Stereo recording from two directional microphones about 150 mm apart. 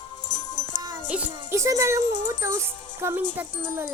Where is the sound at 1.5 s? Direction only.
20° right (ahead or behind).